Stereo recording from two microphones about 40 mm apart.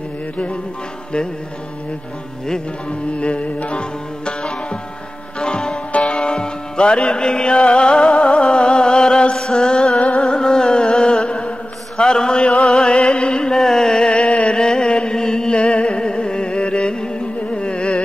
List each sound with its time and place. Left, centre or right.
3.2 s music: left
4.3 s music: left
5.9 s music: left
6.1 s music: left
10.3 s carnatic music: centre
12.0 s a sound: left
12.6 s music: centre
13.1 s carnatic music: left
13.6 s a sound: centre; by 18.0 s left